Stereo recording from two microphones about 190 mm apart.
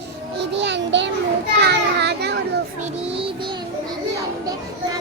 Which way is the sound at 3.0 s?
30° right (ahead or behind).